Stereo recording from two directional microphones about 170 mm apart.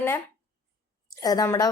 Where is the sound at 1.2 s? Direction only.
20° left (ahead or behind).